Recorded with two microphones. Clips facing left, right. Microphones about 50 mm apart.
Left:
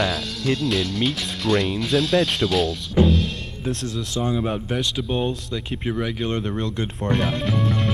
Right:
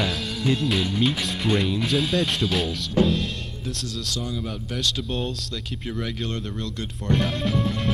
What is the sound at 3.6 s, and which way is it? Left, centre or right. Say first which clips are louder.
Speech: left 7 dB; left.